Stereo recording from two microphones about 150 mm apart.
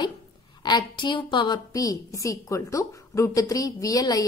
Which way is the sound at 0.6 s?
30° left (ahead or behind).